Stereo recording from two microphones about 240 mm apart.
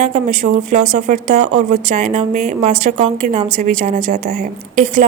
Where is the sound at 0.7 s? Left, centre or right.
Right.